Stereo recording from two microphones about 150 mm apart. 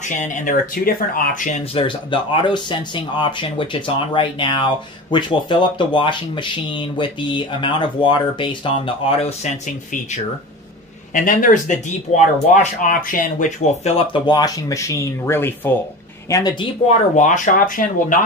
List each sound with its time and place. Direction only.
0.2 s speech: 60° left (ahead or behind)
1.6 s speech: 40° left (ahead or behind)
11.1 s speech: 65° left (ahead or behind)
12.8 s speech: 65° left (ahead or behind); by 16.7 s 30° left (ahead or behind)
17.1 s speech: 55° left (ahead or behind)